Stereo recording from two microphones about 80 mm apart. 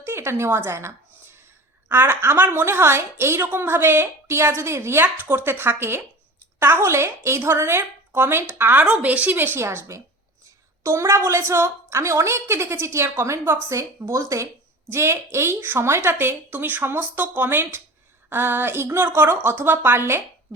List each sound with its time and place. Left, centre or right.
0.0 s a woman's voice: right